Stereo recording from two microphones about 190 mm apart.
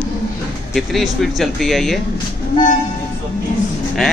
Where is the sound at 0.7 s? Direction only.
Centre (ahead or behind).